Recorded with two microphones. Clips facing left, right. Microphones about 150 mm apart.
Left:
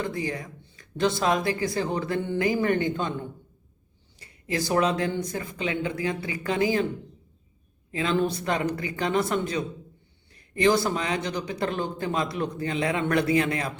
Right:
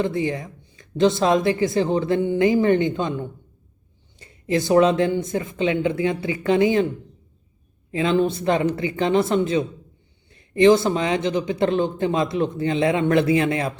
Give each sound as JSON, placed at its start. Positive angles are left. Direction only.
{"t": 0.0, "sound": "speech", "side_deg": -25}
{"t": 7.9, "sound": "speech", "side_deg": -25}